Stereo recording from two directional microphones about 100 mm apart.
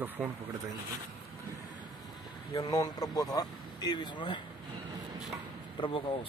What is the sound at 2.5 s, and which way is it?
Speech, 35° left (ahead or behind).